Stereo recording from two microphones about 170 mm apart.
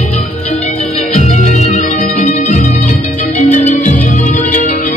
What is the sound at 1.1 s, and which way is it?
Music, 45° left (ahead or behind).